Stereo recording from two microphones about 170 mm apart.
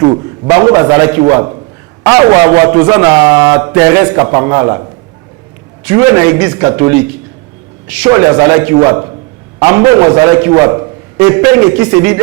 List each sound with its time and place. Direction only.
0.0 s a man's voice: 20° right (ahead or behind)
5.8 s a man's voice: 15° right (ahead or behind)